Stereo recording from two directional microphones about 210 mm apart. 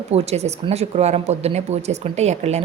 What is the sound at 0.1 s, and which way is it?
A woman's voice, 30° right (ahead or behind).